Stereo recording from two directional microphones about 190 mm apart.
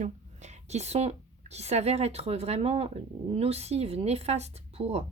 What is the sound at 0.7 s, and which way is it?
Speech, 35° right (ahead or behind).